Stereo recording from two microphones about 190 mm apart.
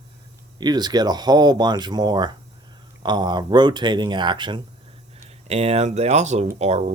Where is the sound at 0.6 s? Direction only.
20° right (ahead or behind).